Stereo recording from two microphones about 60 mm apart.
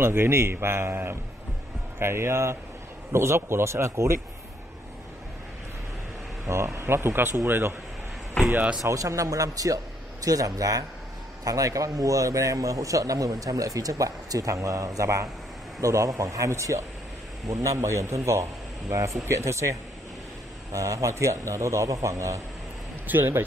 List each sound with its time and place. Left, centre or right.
0.0 s a man's voice: right
6.4 s speech: right
8.8 s a man's voice: right
23.0 s speech: right